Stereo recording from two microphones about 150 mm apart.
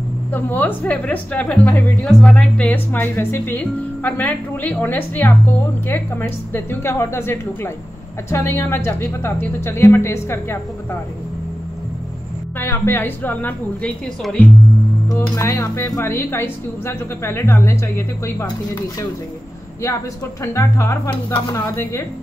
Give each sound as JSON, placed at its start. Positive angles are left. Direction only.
{"t": 0.3, "sound": "a woman's voice", "side_deg": 15}
{"t": 12.5, "sound": "a woman's voice", "side_deg": 15}
{"t": 15.0, "sound": "a woman's voice", "side_deg": 20}
{"t": 20.4, "sound": "speech", "side_deg": 20}